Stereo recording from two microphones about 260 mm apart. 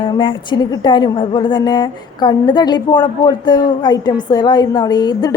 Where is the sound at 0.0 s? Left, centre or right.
Centre.